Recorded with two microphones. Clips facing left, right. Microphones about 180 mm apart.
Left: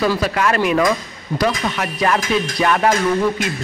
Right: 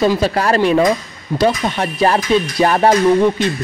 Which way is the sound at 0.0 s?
30° right (ahead or behind).